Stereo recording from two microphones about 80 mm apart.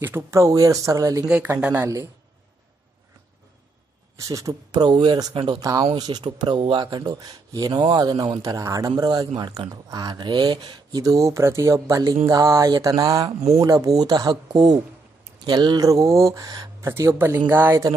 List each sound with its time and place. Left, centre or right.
0.0 s speech: right
1.6 s speech: centre
4.2 s speech: right
4.7 s speech: right
5.6 s speech: right
6.0 s speech: right
11.0 s speech: right
12.1 s speech: right
14.5 s speech: right
15.4 s speech: right
15.8 s speech: right
16.8 s speech: right